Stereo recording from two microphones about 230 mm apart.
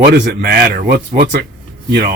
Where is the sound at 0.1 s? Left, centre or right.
Right.